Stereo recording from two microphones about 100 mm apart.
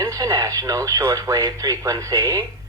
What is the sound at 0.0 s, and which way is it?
Speech, 35° right (ahead or behind).